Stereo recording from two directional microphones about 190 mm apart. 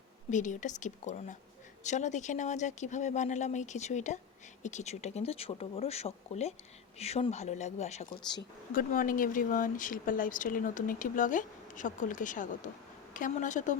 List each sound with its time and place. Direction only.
0.3 s speech: 40° left (ahead or behind)